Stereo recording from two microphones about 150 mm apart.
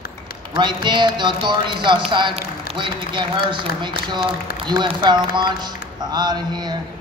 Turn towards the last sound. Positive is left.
turn(degrees=-30)  # may be behind; listen again after turning